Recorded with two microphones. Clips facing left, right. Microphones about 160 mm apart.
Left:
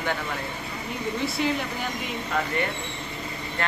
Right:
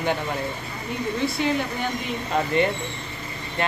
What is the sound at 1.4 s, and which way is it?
Speech, centre (ahead or behind).